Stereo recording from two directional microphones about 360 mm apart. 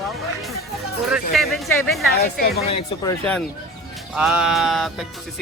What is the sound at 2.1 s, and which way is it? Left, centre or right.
Speech, left.